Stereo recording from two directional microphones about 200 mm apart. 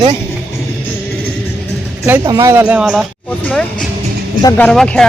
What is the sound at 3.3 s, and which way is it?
A woman's voice, 10° left (ahead or behind).